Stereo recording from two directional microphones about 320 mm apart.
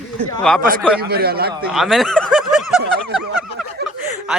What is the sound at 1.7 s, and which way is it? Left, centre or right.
Snicker, centre.